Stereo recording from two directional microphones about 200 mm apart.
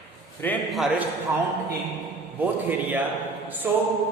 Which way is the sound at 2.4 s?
10° right (ahead or behind).